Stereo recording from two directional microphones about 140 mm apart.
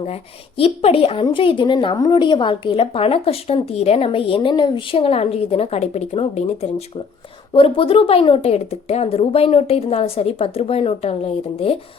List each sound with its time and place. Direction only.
0.0 s a woman's voice: 45° left (ahead or behind)
7.5 s a woman's voice: 40° left (ahead or behind)